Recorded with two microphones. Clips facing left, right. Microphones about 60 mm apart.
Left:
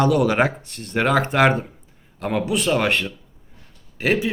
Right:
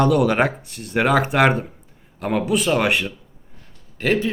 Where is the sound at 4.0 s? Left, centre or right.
Centre.